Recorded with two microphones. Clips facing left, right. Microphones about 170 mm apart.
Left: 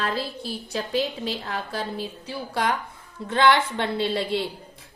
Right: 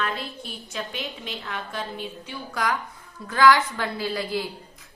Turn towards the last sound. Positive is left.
turn(degrees=25)  # may be behind; listen again after turning